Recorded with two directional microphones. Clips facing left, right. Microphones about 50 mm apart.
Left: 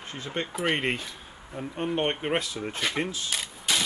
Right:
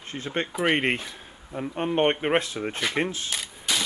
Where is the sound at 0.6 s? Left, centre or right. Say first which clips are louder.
Right 4 dB; right.